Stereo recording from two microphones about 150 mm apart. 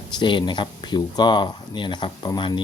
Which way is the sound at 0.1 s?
30° left (ahead or behind).